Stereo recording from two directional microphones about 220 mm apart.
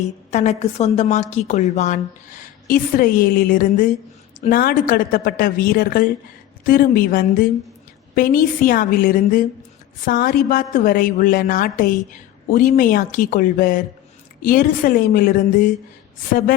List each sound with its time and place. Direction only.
0.3 s a woman's voice: 30° left (ahead or behind)